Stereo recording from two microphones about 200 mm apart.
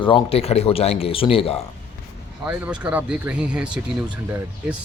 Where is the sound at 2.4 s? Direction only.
5° right (ahead or behind).